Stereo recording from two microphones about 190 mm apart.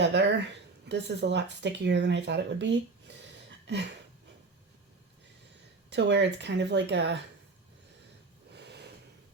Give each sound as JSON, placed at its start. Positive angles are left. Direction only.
{"t": 0.0, "sound": "speech", "side_deg": -65}
{"t": 5.9, "sound": "speech", "side_deg": -65}
{"t": 8.5, "sound": "snort", "side_deg": -60}